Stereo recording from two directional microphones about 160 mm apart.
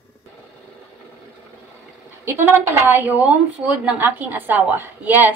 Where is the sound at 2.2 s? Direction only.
15° right (ahead or behind).